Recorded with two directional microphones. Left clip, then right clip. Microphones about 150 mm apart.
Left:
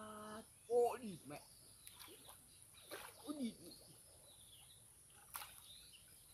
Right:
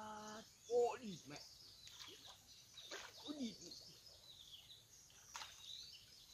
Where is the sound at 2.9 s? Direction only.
30° left (ahead or behind).